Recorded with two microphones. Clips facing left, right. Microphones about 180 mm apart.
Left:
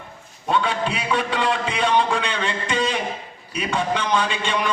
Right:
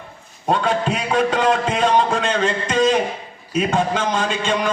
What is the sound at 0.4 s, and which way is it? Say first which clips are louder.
A man's voice: right 3 dB; 45° right (ahead or behind).